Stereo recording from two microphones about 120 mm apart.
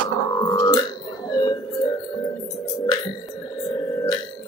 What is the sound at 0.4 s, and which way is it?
Burping, 30° left (ahead or behind).